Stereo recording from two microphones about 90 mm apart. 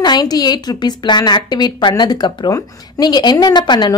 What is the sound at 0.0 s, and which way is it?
A woman's voice, 50° left (ahead or behind).